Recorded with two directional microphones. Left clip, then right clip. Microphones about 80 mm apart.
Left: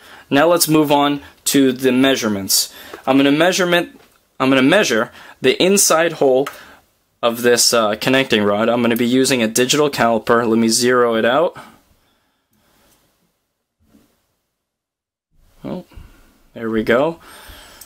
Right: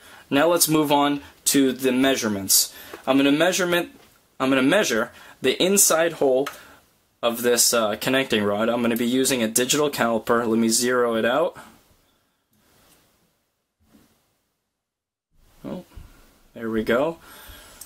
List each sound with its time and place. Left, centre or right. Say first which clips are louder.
0.0 s speech: left 6 dB; left
15.6 s a sound: left 6 dB; left
16.5 s speech: left 6 dB; left